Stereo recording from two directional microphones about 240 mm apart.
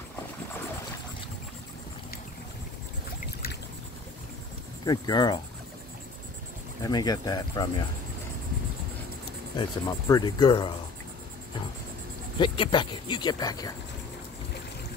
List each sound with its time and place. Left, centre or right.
4.8 s speech: centre
6.8 s speech: centre
9.6 s speech: centre
12.4 s speech: left